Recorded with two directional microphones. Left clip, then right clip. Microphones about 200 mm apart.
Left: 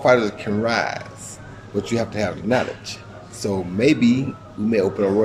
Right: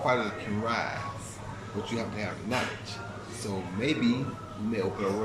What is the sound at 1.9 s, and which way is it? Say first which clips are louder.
A man's voice: left 11 dB; 55° left (ahead or behind).